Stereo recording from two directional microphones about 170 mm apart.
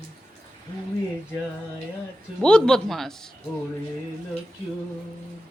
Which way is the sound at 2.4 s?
5° left (ahead or behind).